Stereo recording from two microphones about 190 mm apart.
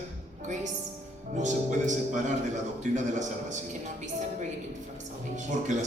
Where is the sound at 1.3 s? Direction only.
40° right (ahead or behind).